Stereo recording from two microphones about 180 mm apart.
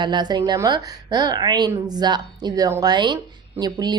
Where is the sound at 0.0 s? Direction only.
25° right (ahead or behind).